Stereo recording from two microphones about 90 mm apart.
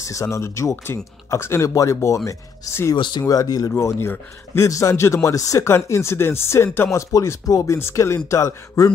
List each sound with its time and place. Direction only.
0.0 s a man's voice: 35° left (ahead or behind)
3.0 s speech: 60° left (ahead or behind)
3.3 s a man's voice: 45° left (ahead or behind)
3.7 s a man's voice: 30° left (ahead or behind)